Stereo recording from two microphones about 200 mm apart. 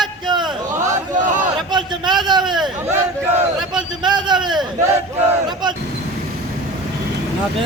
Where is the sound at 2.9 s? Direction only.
10° right (ahead or behind).